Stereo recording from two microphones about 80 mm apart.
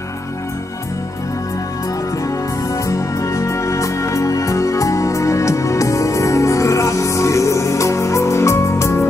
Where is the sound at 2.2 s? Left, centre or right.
Left.